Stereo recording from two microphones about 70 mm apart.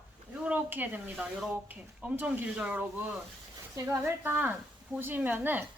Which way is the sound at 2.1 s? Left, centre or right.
Right.